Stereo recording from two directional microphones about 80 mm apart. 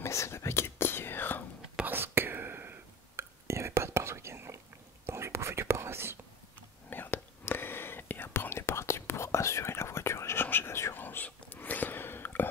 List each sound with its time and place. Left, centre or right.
0.0 s whispering: left
1.9 s whispering: right
6.9 s whispering: left